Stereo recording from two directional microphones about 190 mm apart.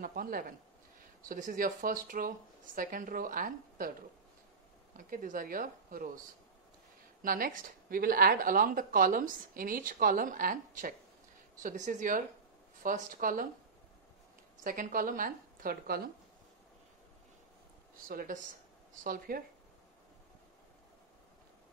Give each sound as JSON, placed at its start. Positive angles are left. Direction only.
{"t": 0.0, "sound": "speech", "side_deg": -50}
{"t": 4.9, "sound": "speech", "side_deg": -45}
{"t": 7.2, "sound": "speech", "side_deg": -50}
{"t": 14.6, "sound": "speech", "side_deg": -45}
{"t": 17.9, "sound": "speech", "side_deg": -45}